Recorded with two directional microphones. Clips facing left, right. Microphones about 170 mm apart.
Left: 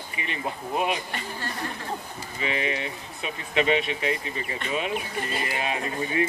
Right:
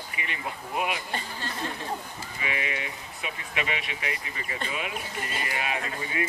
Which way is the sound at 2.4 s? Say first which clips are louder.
Left 5 dB; 25° left (ahead or behind).